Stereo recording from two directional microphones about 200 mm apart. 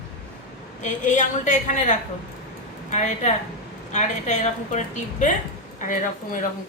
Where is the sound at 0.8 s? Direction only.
35° left (ahead or behind).